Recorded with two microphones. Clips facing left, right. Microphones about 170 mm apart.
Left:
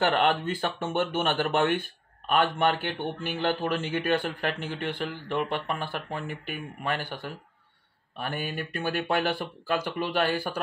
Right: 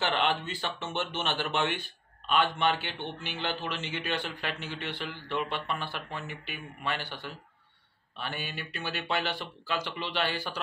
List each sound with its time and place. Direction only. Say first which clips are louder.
0.0 s speech: left 5 dB; 50° left (ahead or behind)